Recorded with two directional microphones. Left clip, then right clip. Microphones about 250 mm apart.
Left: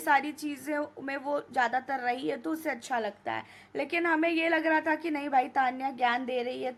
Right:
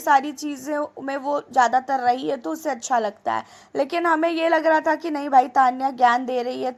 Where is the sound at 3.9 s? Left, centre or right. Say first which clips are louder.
Right 6 dB; centre.